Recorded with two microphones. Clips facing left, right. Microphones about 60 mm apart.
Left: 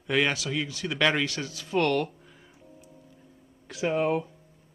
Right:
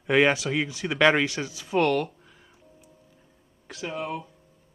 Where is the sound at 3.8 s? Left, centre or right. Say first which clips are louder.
Left 7 dB; left.